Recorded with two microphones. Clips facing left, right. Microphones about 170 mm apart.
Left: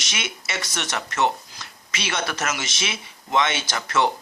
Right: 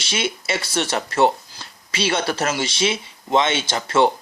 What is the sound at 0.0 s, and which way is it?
Speech, 30° right (ahead or behind).